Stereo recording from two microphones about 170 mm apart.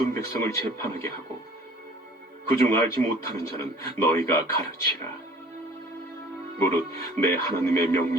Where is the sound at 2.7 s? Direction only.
15° left (ahead or behind).